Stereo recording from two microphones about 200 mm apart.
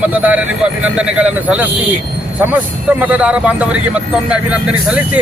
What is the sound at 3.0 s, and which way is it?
Speech, 5° right (ahead or behind).